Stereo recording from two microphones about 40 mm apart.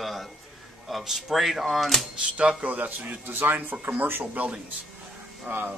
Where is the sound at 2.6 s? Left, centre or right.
Right.